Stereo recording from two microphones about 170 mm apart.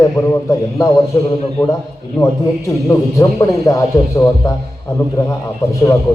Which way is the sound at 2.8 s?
20° left (ahead or behind).